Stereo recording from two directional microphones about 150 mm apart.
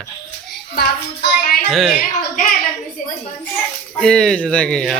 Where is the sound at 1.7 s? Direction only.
Centre (ahead or behind).